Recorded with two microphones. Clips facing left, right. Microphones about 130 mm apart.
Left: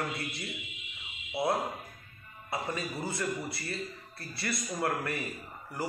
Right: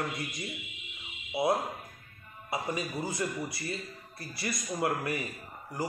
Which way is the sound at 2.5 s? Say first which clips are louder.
Right 2 dB; 20° right (ahead or behind).